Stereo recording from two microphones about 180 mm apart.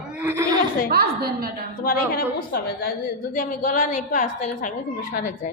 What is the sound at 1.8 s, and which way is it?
A woman's voice, 55° left (ahead or behind).